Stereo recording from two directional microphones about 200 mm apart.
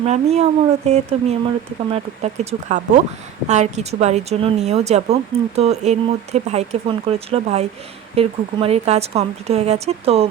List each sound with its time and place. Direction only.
0.0 s speech: 30° right (ahead or behind)